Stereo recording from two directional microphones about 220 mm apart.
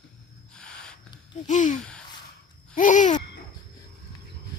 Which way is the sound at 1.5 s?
35° left (ahead or behind).